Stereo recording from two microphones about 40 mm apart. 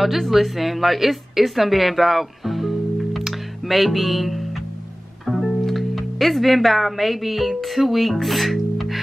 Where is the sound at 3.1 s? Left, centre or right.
Centre.